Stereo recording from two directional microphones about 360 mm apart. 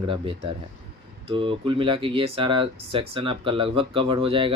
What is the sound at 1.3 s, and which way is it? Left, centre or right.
Speech, centre.